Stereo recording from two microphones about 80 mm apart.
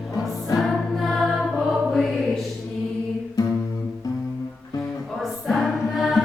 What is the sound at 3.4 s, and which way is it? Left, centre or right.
Music, left.